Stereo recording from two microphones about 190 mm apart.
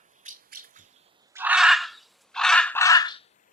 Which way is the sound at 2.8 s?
20° left (ahead or behind).